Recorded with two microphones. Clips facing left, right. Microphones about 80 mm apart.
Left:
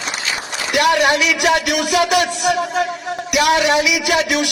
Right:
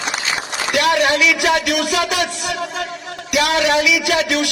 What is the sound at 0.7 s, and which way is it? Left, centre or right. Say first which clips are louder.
A man's voice: left 1 dB; left.